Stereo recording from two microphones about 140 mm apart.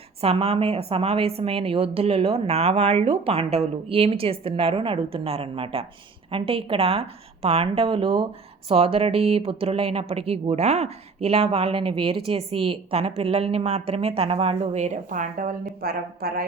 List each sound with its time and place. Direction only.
0.2 s a woman's voice: 45° right (ahead or behind); by 16.5 s 90° right